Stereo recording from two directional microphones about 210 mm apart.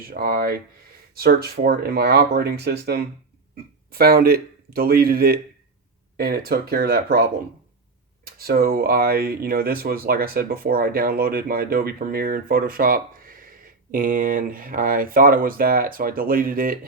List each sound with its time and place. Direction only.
0.0 s speech: 45° right (ahead or behind)